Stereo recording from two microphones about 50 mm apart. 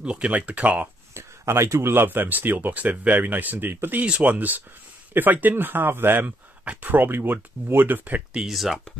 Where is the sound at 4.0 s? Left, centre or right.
Right.